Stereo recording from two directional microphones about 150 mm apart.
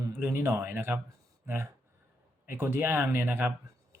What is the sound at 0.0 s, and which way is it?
Speech, 15° right (ahead or behind).